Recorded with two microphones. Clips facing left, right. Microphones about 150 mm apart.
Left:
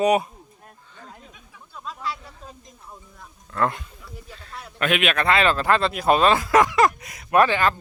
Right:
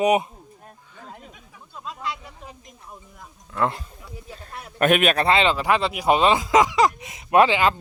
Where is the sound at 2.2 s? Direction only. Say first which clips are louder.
Right 1 dB; 15° right (ahead or behind).